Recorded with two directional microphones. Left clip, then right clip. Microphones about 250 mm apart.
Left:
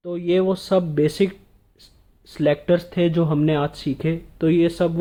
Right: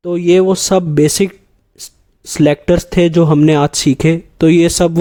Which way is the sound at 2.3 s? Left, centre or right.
Right.